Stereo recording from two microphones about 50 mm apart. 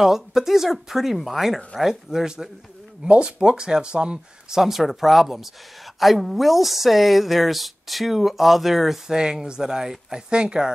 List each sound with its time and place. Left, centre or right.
0.0 s speech: centre
4.6 s speech: centre